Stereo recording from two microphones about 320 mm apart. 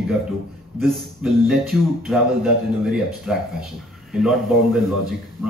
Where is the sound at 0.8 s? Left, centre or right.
Centre.